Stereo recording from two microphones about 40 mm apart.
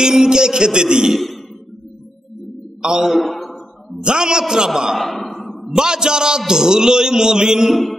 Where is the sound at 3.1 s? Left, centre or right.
Centre.